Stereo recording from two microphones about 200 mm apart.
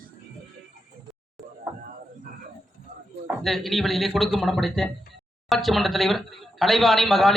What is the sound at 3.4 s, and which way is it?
Speech, centre (ahead or behind).